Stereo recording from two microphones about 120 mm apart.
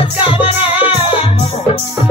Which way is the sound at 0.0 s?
50° left (ahead or behind).